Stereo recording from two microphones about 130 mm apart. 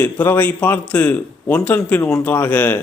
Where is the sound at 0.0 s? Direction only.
15° left (ahead or behind).